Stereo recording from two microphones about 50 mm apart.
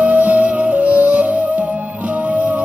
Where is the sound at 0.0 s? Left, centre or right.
Right.